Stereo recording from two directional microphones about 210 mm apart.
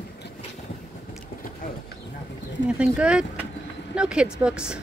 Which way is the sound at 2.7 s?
5° right (ahead or behind).